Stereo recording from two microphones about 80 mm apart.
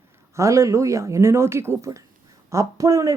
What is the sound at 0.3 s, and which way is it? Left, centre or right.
A woman's voice, right.